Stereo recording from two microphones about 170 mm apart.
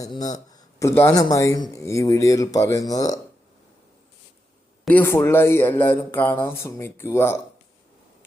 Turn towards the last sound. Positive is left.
turn(degrees=15)  # may be behind; listen again after turning